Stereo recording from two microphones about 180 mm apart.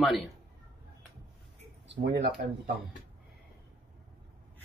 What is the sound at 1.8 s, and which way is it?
Speech, 70° right (ahead or behind).